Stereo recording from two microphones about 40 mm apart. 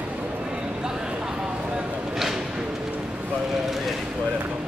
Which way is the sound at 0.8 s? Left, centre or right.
Centre.